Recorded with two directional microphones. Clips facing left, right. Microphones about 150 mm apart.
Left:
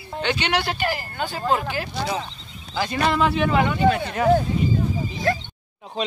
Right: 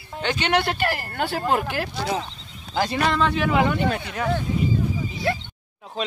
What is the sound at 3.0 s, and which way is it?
Speech, 5° left (ahead or behind).